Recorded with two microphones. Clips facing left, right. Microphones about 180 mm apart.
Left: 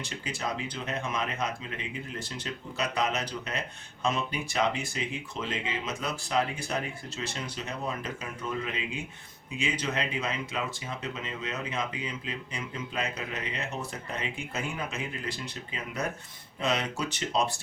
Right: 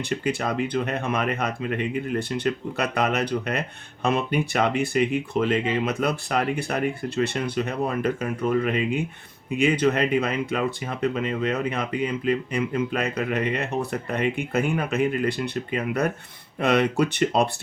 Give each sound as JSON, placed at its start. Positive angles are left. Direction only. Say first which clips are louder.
{"t": 0.0, "sound": "speech", "louder": "right 9 dB", "side_deg": -60}